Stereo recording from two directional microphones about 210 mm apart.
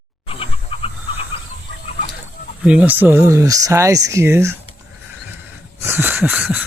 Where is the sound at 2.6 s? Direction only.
5° right (ahead or behind).